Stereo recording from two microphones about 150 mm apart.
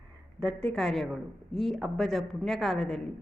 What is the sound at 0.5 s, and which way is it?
A woman's voice, 5° left (ahead or behind).